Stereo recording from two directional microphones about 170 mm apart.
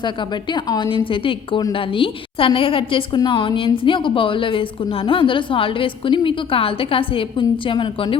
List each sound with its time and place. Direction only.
0.5 s a woman's voice: 25° left (ahead or behind)